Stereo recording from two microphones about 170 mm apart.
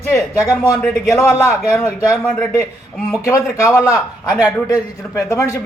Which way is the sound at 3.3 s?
20° left (ahead or behind).